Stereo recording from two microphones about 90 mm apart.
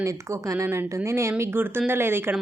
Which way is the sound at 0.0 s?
35° right (ahead or behind).